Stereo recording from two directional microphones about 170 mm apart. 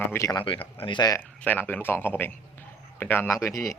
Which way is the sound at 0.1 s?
20° left (ahead or behind).